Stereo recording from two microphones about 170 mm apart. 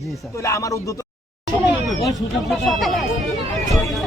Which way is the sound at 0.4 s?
20° left (ahead or behind).